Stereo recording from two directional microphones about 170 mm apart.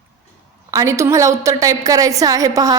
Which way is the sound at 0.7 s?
20° right (ahead or behind).